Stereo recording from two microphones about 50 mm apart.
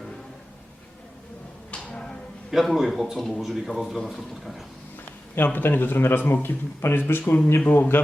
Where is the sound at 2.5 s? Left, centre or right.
Centre.